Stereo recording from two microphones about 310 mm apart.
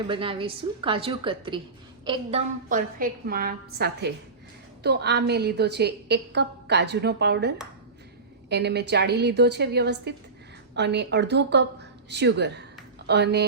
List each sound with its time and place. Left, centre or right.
0.1 s a woman's voice: centre
2.6 s a woman's voice: right